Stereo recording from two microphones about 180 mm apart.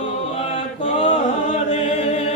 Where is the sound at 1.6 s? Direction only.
30° left (ahead or behind).